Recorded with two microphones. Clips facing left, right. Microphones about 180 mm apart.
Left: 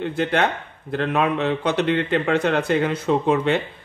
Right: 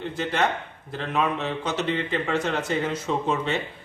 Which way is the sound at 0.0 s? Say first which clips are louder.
Left 4 dB; 60° left (ahead or behind).